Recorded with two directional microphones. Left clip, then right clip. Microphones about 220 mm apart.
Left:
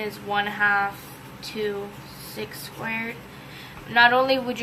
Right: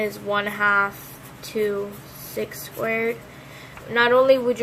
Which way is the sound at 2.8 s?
20° right (ahead or behind).